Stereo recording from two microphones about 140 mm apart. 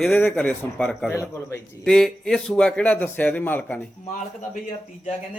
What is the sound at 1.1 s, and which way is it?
Speech, 20° left (ahead or behind).